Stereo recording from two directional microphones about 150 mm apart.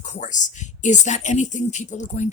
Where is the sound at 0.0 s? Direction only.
55° left (ahead or behind).